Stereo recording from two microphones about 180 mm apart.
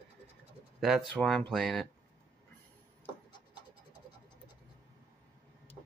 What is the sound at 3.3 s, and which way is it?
Scratch, 25° left (ahead or behind).